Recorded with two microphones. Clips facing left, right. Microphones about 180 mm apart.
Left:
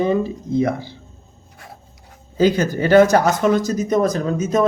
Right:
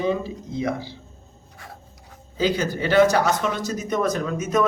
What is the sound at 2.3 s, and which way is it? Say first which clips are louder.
Speech: left 6 dB; 45° left (ahead or behind).